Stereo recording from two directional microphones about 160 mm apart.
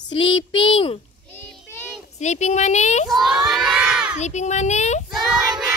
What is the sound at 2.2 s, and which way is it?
Speech, 45° left (ahead or behind).